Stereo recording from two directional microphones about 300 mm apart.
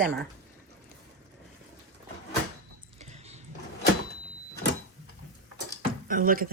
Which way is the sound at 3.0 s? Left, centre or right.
Right.